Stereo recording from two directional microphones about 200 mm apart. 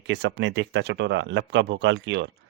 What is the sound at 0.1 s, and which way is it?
A man's voice, 60° right (ahead or behind).